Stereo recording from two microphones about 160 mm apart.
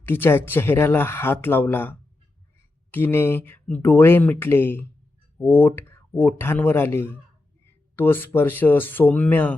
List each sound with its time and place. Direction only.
0.0 s speech: 15° left (ahead or behind)